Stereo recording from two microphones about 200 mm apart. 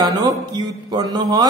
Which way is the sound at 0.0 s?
20° right (ahead or behind).